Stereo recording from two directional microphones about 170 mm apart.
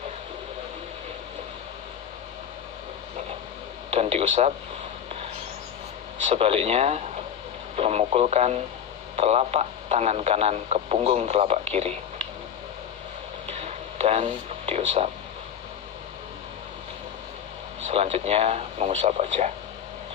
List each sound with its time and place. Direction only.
3.9 s speech: 35° right (ahead or behind)
6.2 s speech: 35° right (ahead or behind)
13.5 s a sound: 35° right (ahead or behind)
17.8 s speech: 35° right (ahead or behind)